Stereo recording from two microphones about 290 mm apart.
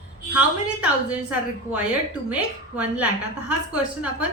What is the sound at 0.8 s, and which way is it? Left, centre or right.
A woman's voice, centre.